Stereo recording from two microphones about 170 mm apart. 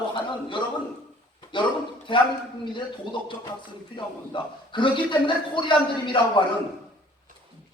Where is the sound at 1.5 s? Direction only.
30° left (ahead or behind).